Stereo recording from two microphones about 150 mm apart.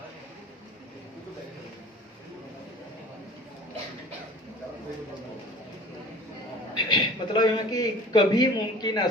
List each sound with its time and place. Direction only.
6.7 s a man's voice: 30° left (ahead or behind)